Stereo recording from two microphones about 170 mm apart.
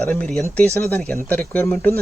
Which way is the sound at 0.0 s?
5° left (ahead or behind).